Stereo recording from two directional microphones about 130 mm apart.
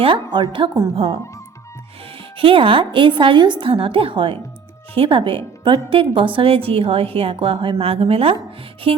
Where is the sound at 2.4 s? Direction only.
40° right (ahead or behind).